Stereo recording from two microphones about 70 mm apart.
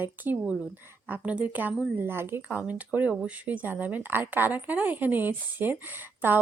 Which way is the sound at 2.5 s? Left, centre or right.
Right.